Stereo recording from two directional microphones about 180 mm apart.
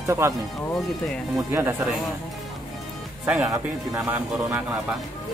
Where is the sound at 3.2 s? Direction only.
10° right (ahead or behind).